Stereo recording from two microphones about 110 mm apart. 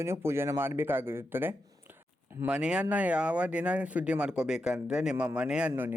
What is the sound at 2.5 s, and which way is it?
Speech, 10° right (ahead or behind).